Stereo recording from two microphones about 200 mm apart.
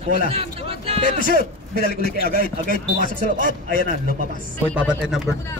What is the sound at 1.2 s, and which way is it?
A man's voice, 45° right (ahead or behind).